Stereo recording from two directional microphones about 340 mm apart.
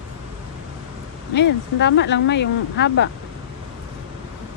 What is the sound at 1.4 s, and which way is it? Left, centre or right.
Speech, left.